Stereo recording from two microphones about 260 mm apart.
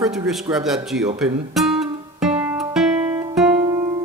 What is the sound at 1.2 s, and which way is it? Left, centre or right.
Music, centre.